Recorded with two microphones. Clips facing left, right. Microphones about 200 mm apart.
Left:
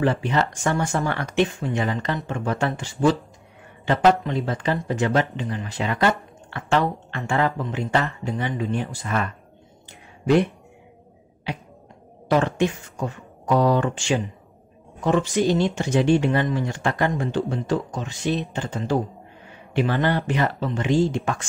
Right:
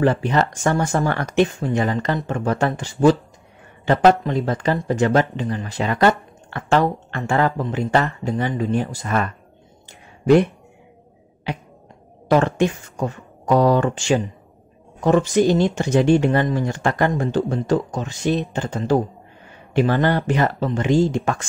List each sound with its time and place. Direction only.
0.0 s speech: 45° right (ahead or behind)
12.3 s speech: 45° right (ahead or behind)